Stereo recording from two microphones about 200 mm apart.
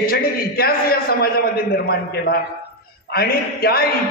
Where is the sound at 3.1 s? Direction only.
50° left (ahead or behind).